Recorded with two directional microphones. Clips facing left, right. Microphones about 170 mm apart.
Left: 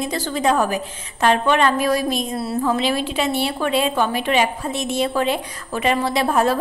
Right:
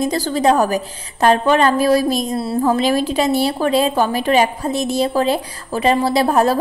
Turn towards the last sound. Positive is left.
turn(degrees=-35)  # may be behind; listen again after turning